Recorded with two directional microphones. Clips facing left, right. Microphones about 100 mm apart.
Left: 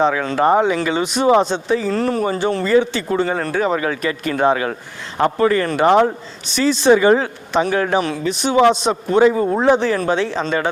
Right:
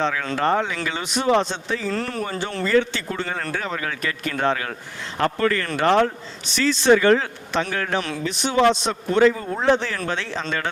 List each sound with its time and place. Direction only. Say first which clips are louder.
0.0 s speech: left 6 dB; 15° left (ahead or behind)